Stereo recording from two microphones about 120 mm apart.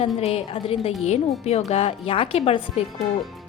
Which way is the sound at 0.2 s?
60° left (ahead or behind).